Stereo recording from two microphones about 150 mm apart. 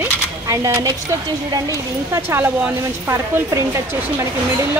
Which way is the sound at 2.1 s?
15° right (ahead or behind).